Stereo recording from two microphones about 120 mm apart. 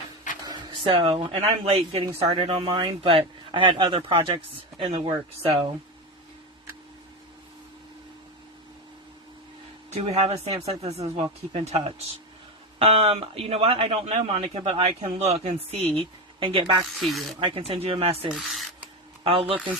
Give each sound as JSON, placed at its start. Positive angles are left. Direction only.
{"t": 0.4, "sound": "speech", "side_deg": -40}
{"t": 9.9, "sound": "speech", "side_deg": -60}
{"t": 12.8, "sound": "speech", "side_deg": -55}
{"t": 15.2, "sound": "speech", "side_deg": -65}
{"t": 17.0, "sound": "speech", "side_deg": 0}
{"t": 17.4, "sound": "speech", "side_deg": -50}
{"t": 18.3, "sound": "a sound", "side_deg": -5}
{"t": 19.2, "sound": "speech", "side_deg": -50}